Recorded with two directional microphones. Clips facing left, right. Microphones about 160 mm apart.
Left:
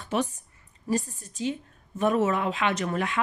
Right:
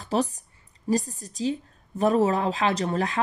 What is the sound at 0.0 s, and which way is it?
A woman's voice, 35° right (ahead or behind).